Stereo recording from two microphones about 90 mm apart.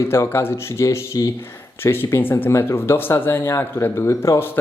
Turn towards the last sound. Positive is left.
turn(degrees=30)  # may be behind; listen again after turning